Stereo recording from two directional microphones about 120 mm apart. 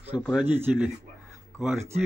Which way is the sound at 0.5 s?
15° right (ahead or behind).